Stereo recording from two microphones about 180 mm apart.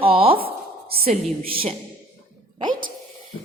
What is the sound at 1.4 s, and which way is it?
Speech, 30° right (ahead or behind).